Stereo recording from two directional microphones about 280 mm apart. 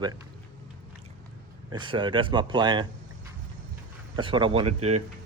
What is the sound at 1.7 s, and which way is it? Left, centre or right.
Speech, centre.